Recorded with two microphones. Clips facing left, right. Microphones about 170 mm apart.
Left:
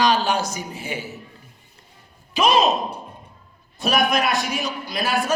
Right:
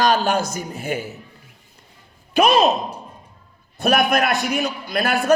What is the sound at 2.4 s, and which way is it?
Speech, 60° right (ahead or behind).